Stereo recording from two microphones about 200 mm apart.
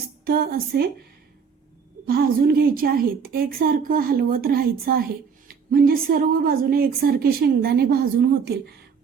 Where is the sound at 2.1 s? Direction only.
50° right (ahead or behind).